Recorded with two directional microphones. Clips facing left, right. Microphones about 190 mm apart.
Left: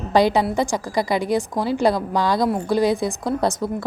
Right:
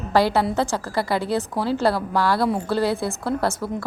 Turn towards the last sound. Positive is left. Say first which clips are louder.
# left 2 dB
turn(degrees=20)  # may be behind; listen again after turning